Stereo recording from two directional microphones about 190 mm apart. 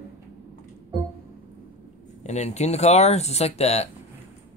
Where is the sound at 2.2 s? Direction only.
35° left (ahead or behind).